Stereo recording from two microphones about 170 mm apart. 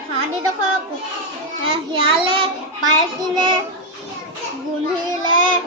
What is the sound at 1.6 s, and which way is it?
Speech, 30° right (ahead or behind).